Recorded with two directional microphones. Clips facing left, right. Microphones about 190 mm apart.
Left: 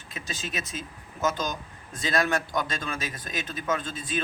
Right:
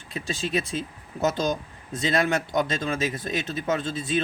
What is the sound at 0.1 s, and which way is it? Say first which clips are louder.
Speech: right 8 dB; 30° right (ahead or behind).